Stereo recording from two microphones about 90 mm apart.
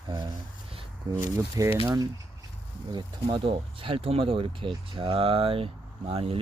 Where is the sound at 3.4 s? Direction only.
85° right.